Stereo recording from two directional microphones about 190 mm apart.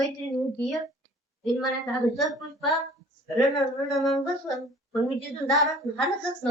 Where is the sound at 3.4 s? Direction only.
Centre (ahead or behind).